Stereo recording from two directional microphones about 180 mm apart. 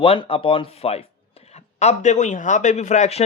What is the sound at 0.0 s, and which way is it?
A man's voice, 30° left (ahead or behind).